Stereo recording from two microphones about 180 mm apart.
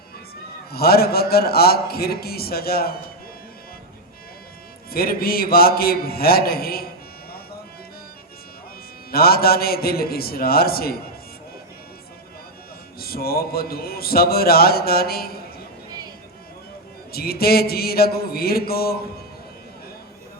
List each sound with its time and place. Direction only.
0.7 s a man's voice: 60° left (ahead or behind)
4.9 s a man's voice: 55° left (ahead or behind)
9.1 s a man's voice: 55° left (ahead or behind)
13.0 s a man's voice: 60° left (ahead or behind)
17.1 s a man's voice: 60° left (ahead or behind)